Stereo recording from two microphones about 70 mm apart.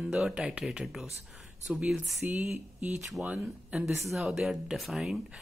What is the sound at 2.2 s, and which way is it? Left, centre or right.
Speech, right.